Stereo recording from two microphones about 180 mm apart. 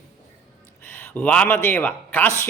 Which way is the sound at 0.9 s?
10° left (ahead or behind).